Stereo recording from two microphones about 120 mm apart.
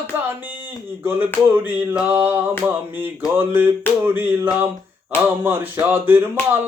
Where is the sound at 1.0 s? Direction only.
15° right (ahead or behind).